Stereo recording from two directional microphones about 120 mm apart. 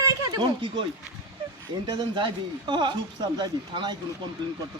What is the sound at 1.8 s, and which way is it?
Speech, 40° right (ahead or behind).